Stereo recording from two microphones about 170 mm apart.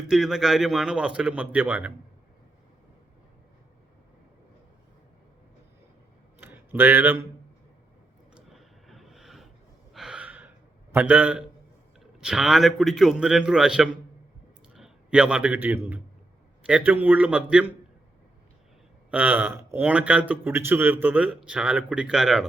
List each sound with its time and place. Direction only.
0.1 s a man's voice: centre (ahead or behind)
6.4 s a sound: 10° right (ahead or behind)
8.5 s vehicle: centre (ahead or behind)
9.9 s gasp: 5° right (ahead or behind)
10.9 s a man's voice: 10° right (ahead or behind)
19.1 s a man's voice: 10° right (ahead or behind)